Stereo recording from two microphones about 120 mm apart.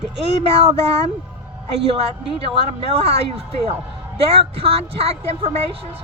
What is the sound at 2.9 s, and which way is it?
Speech, 65° right (ahead or behind).